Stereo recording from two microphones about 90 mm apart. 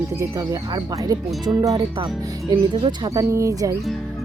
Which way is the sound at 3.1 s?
40° right (ahead or behind).